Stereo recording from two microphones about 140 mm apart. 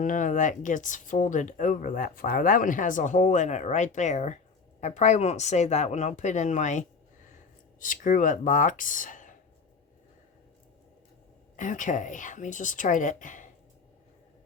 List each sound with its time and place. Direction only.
0.0 s speech: 65° left (ahead or behind)
7.8 s speech: 70° left (ahead or behind)
11.5 s speech: 65° left (ahead or behind)